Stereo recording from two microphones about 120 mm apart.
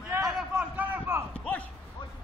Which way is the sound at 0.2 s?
10° right (ahead or behind).